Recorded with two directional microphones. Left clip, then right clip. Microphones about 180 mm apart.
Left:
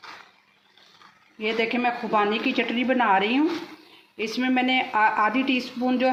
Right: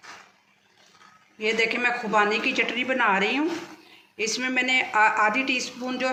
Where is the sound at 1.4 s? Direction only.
45° left (ahead or behind).